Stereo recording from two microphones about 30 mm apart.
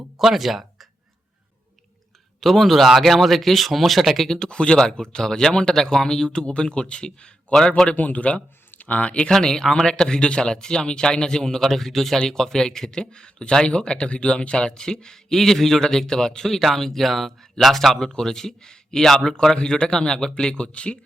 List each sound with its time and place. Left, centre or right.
0.3 s speech: centre
2.4 s speech: centre
4.4 s speech: left
7.9 s speech: left
8.7 s a sound: left
9.3 s speech: centre
17.9 s speech: left